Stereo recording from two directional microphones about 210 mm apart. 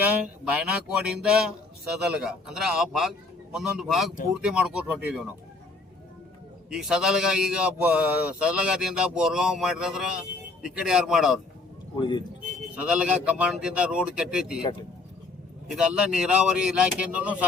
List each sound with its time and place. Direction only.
0.0 s a man's voice: 5° right (ahead or behind)
6.7 s a man's voice: 5° right (ahead or behind)
11.9 s speech: 20° left (ahead or behind)
12.7 s a man's voice: 5° right (ahead or behind)
15.7 s a man's voice: 5° right (ahead or behind)